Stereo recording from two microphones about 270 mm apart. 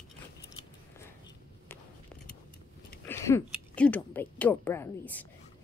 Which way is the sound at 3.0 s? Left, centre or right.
Centre.